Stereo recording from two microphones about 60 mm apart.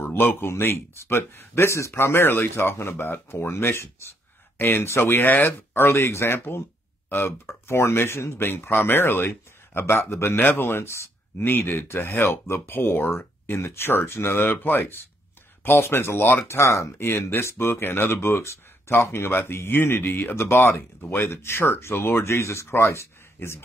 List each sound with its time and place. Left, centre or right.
0.0 s speech: left
4.6 s speech: left
4.8 s speech: left
5.8 s speech: left
11.4 s speech: left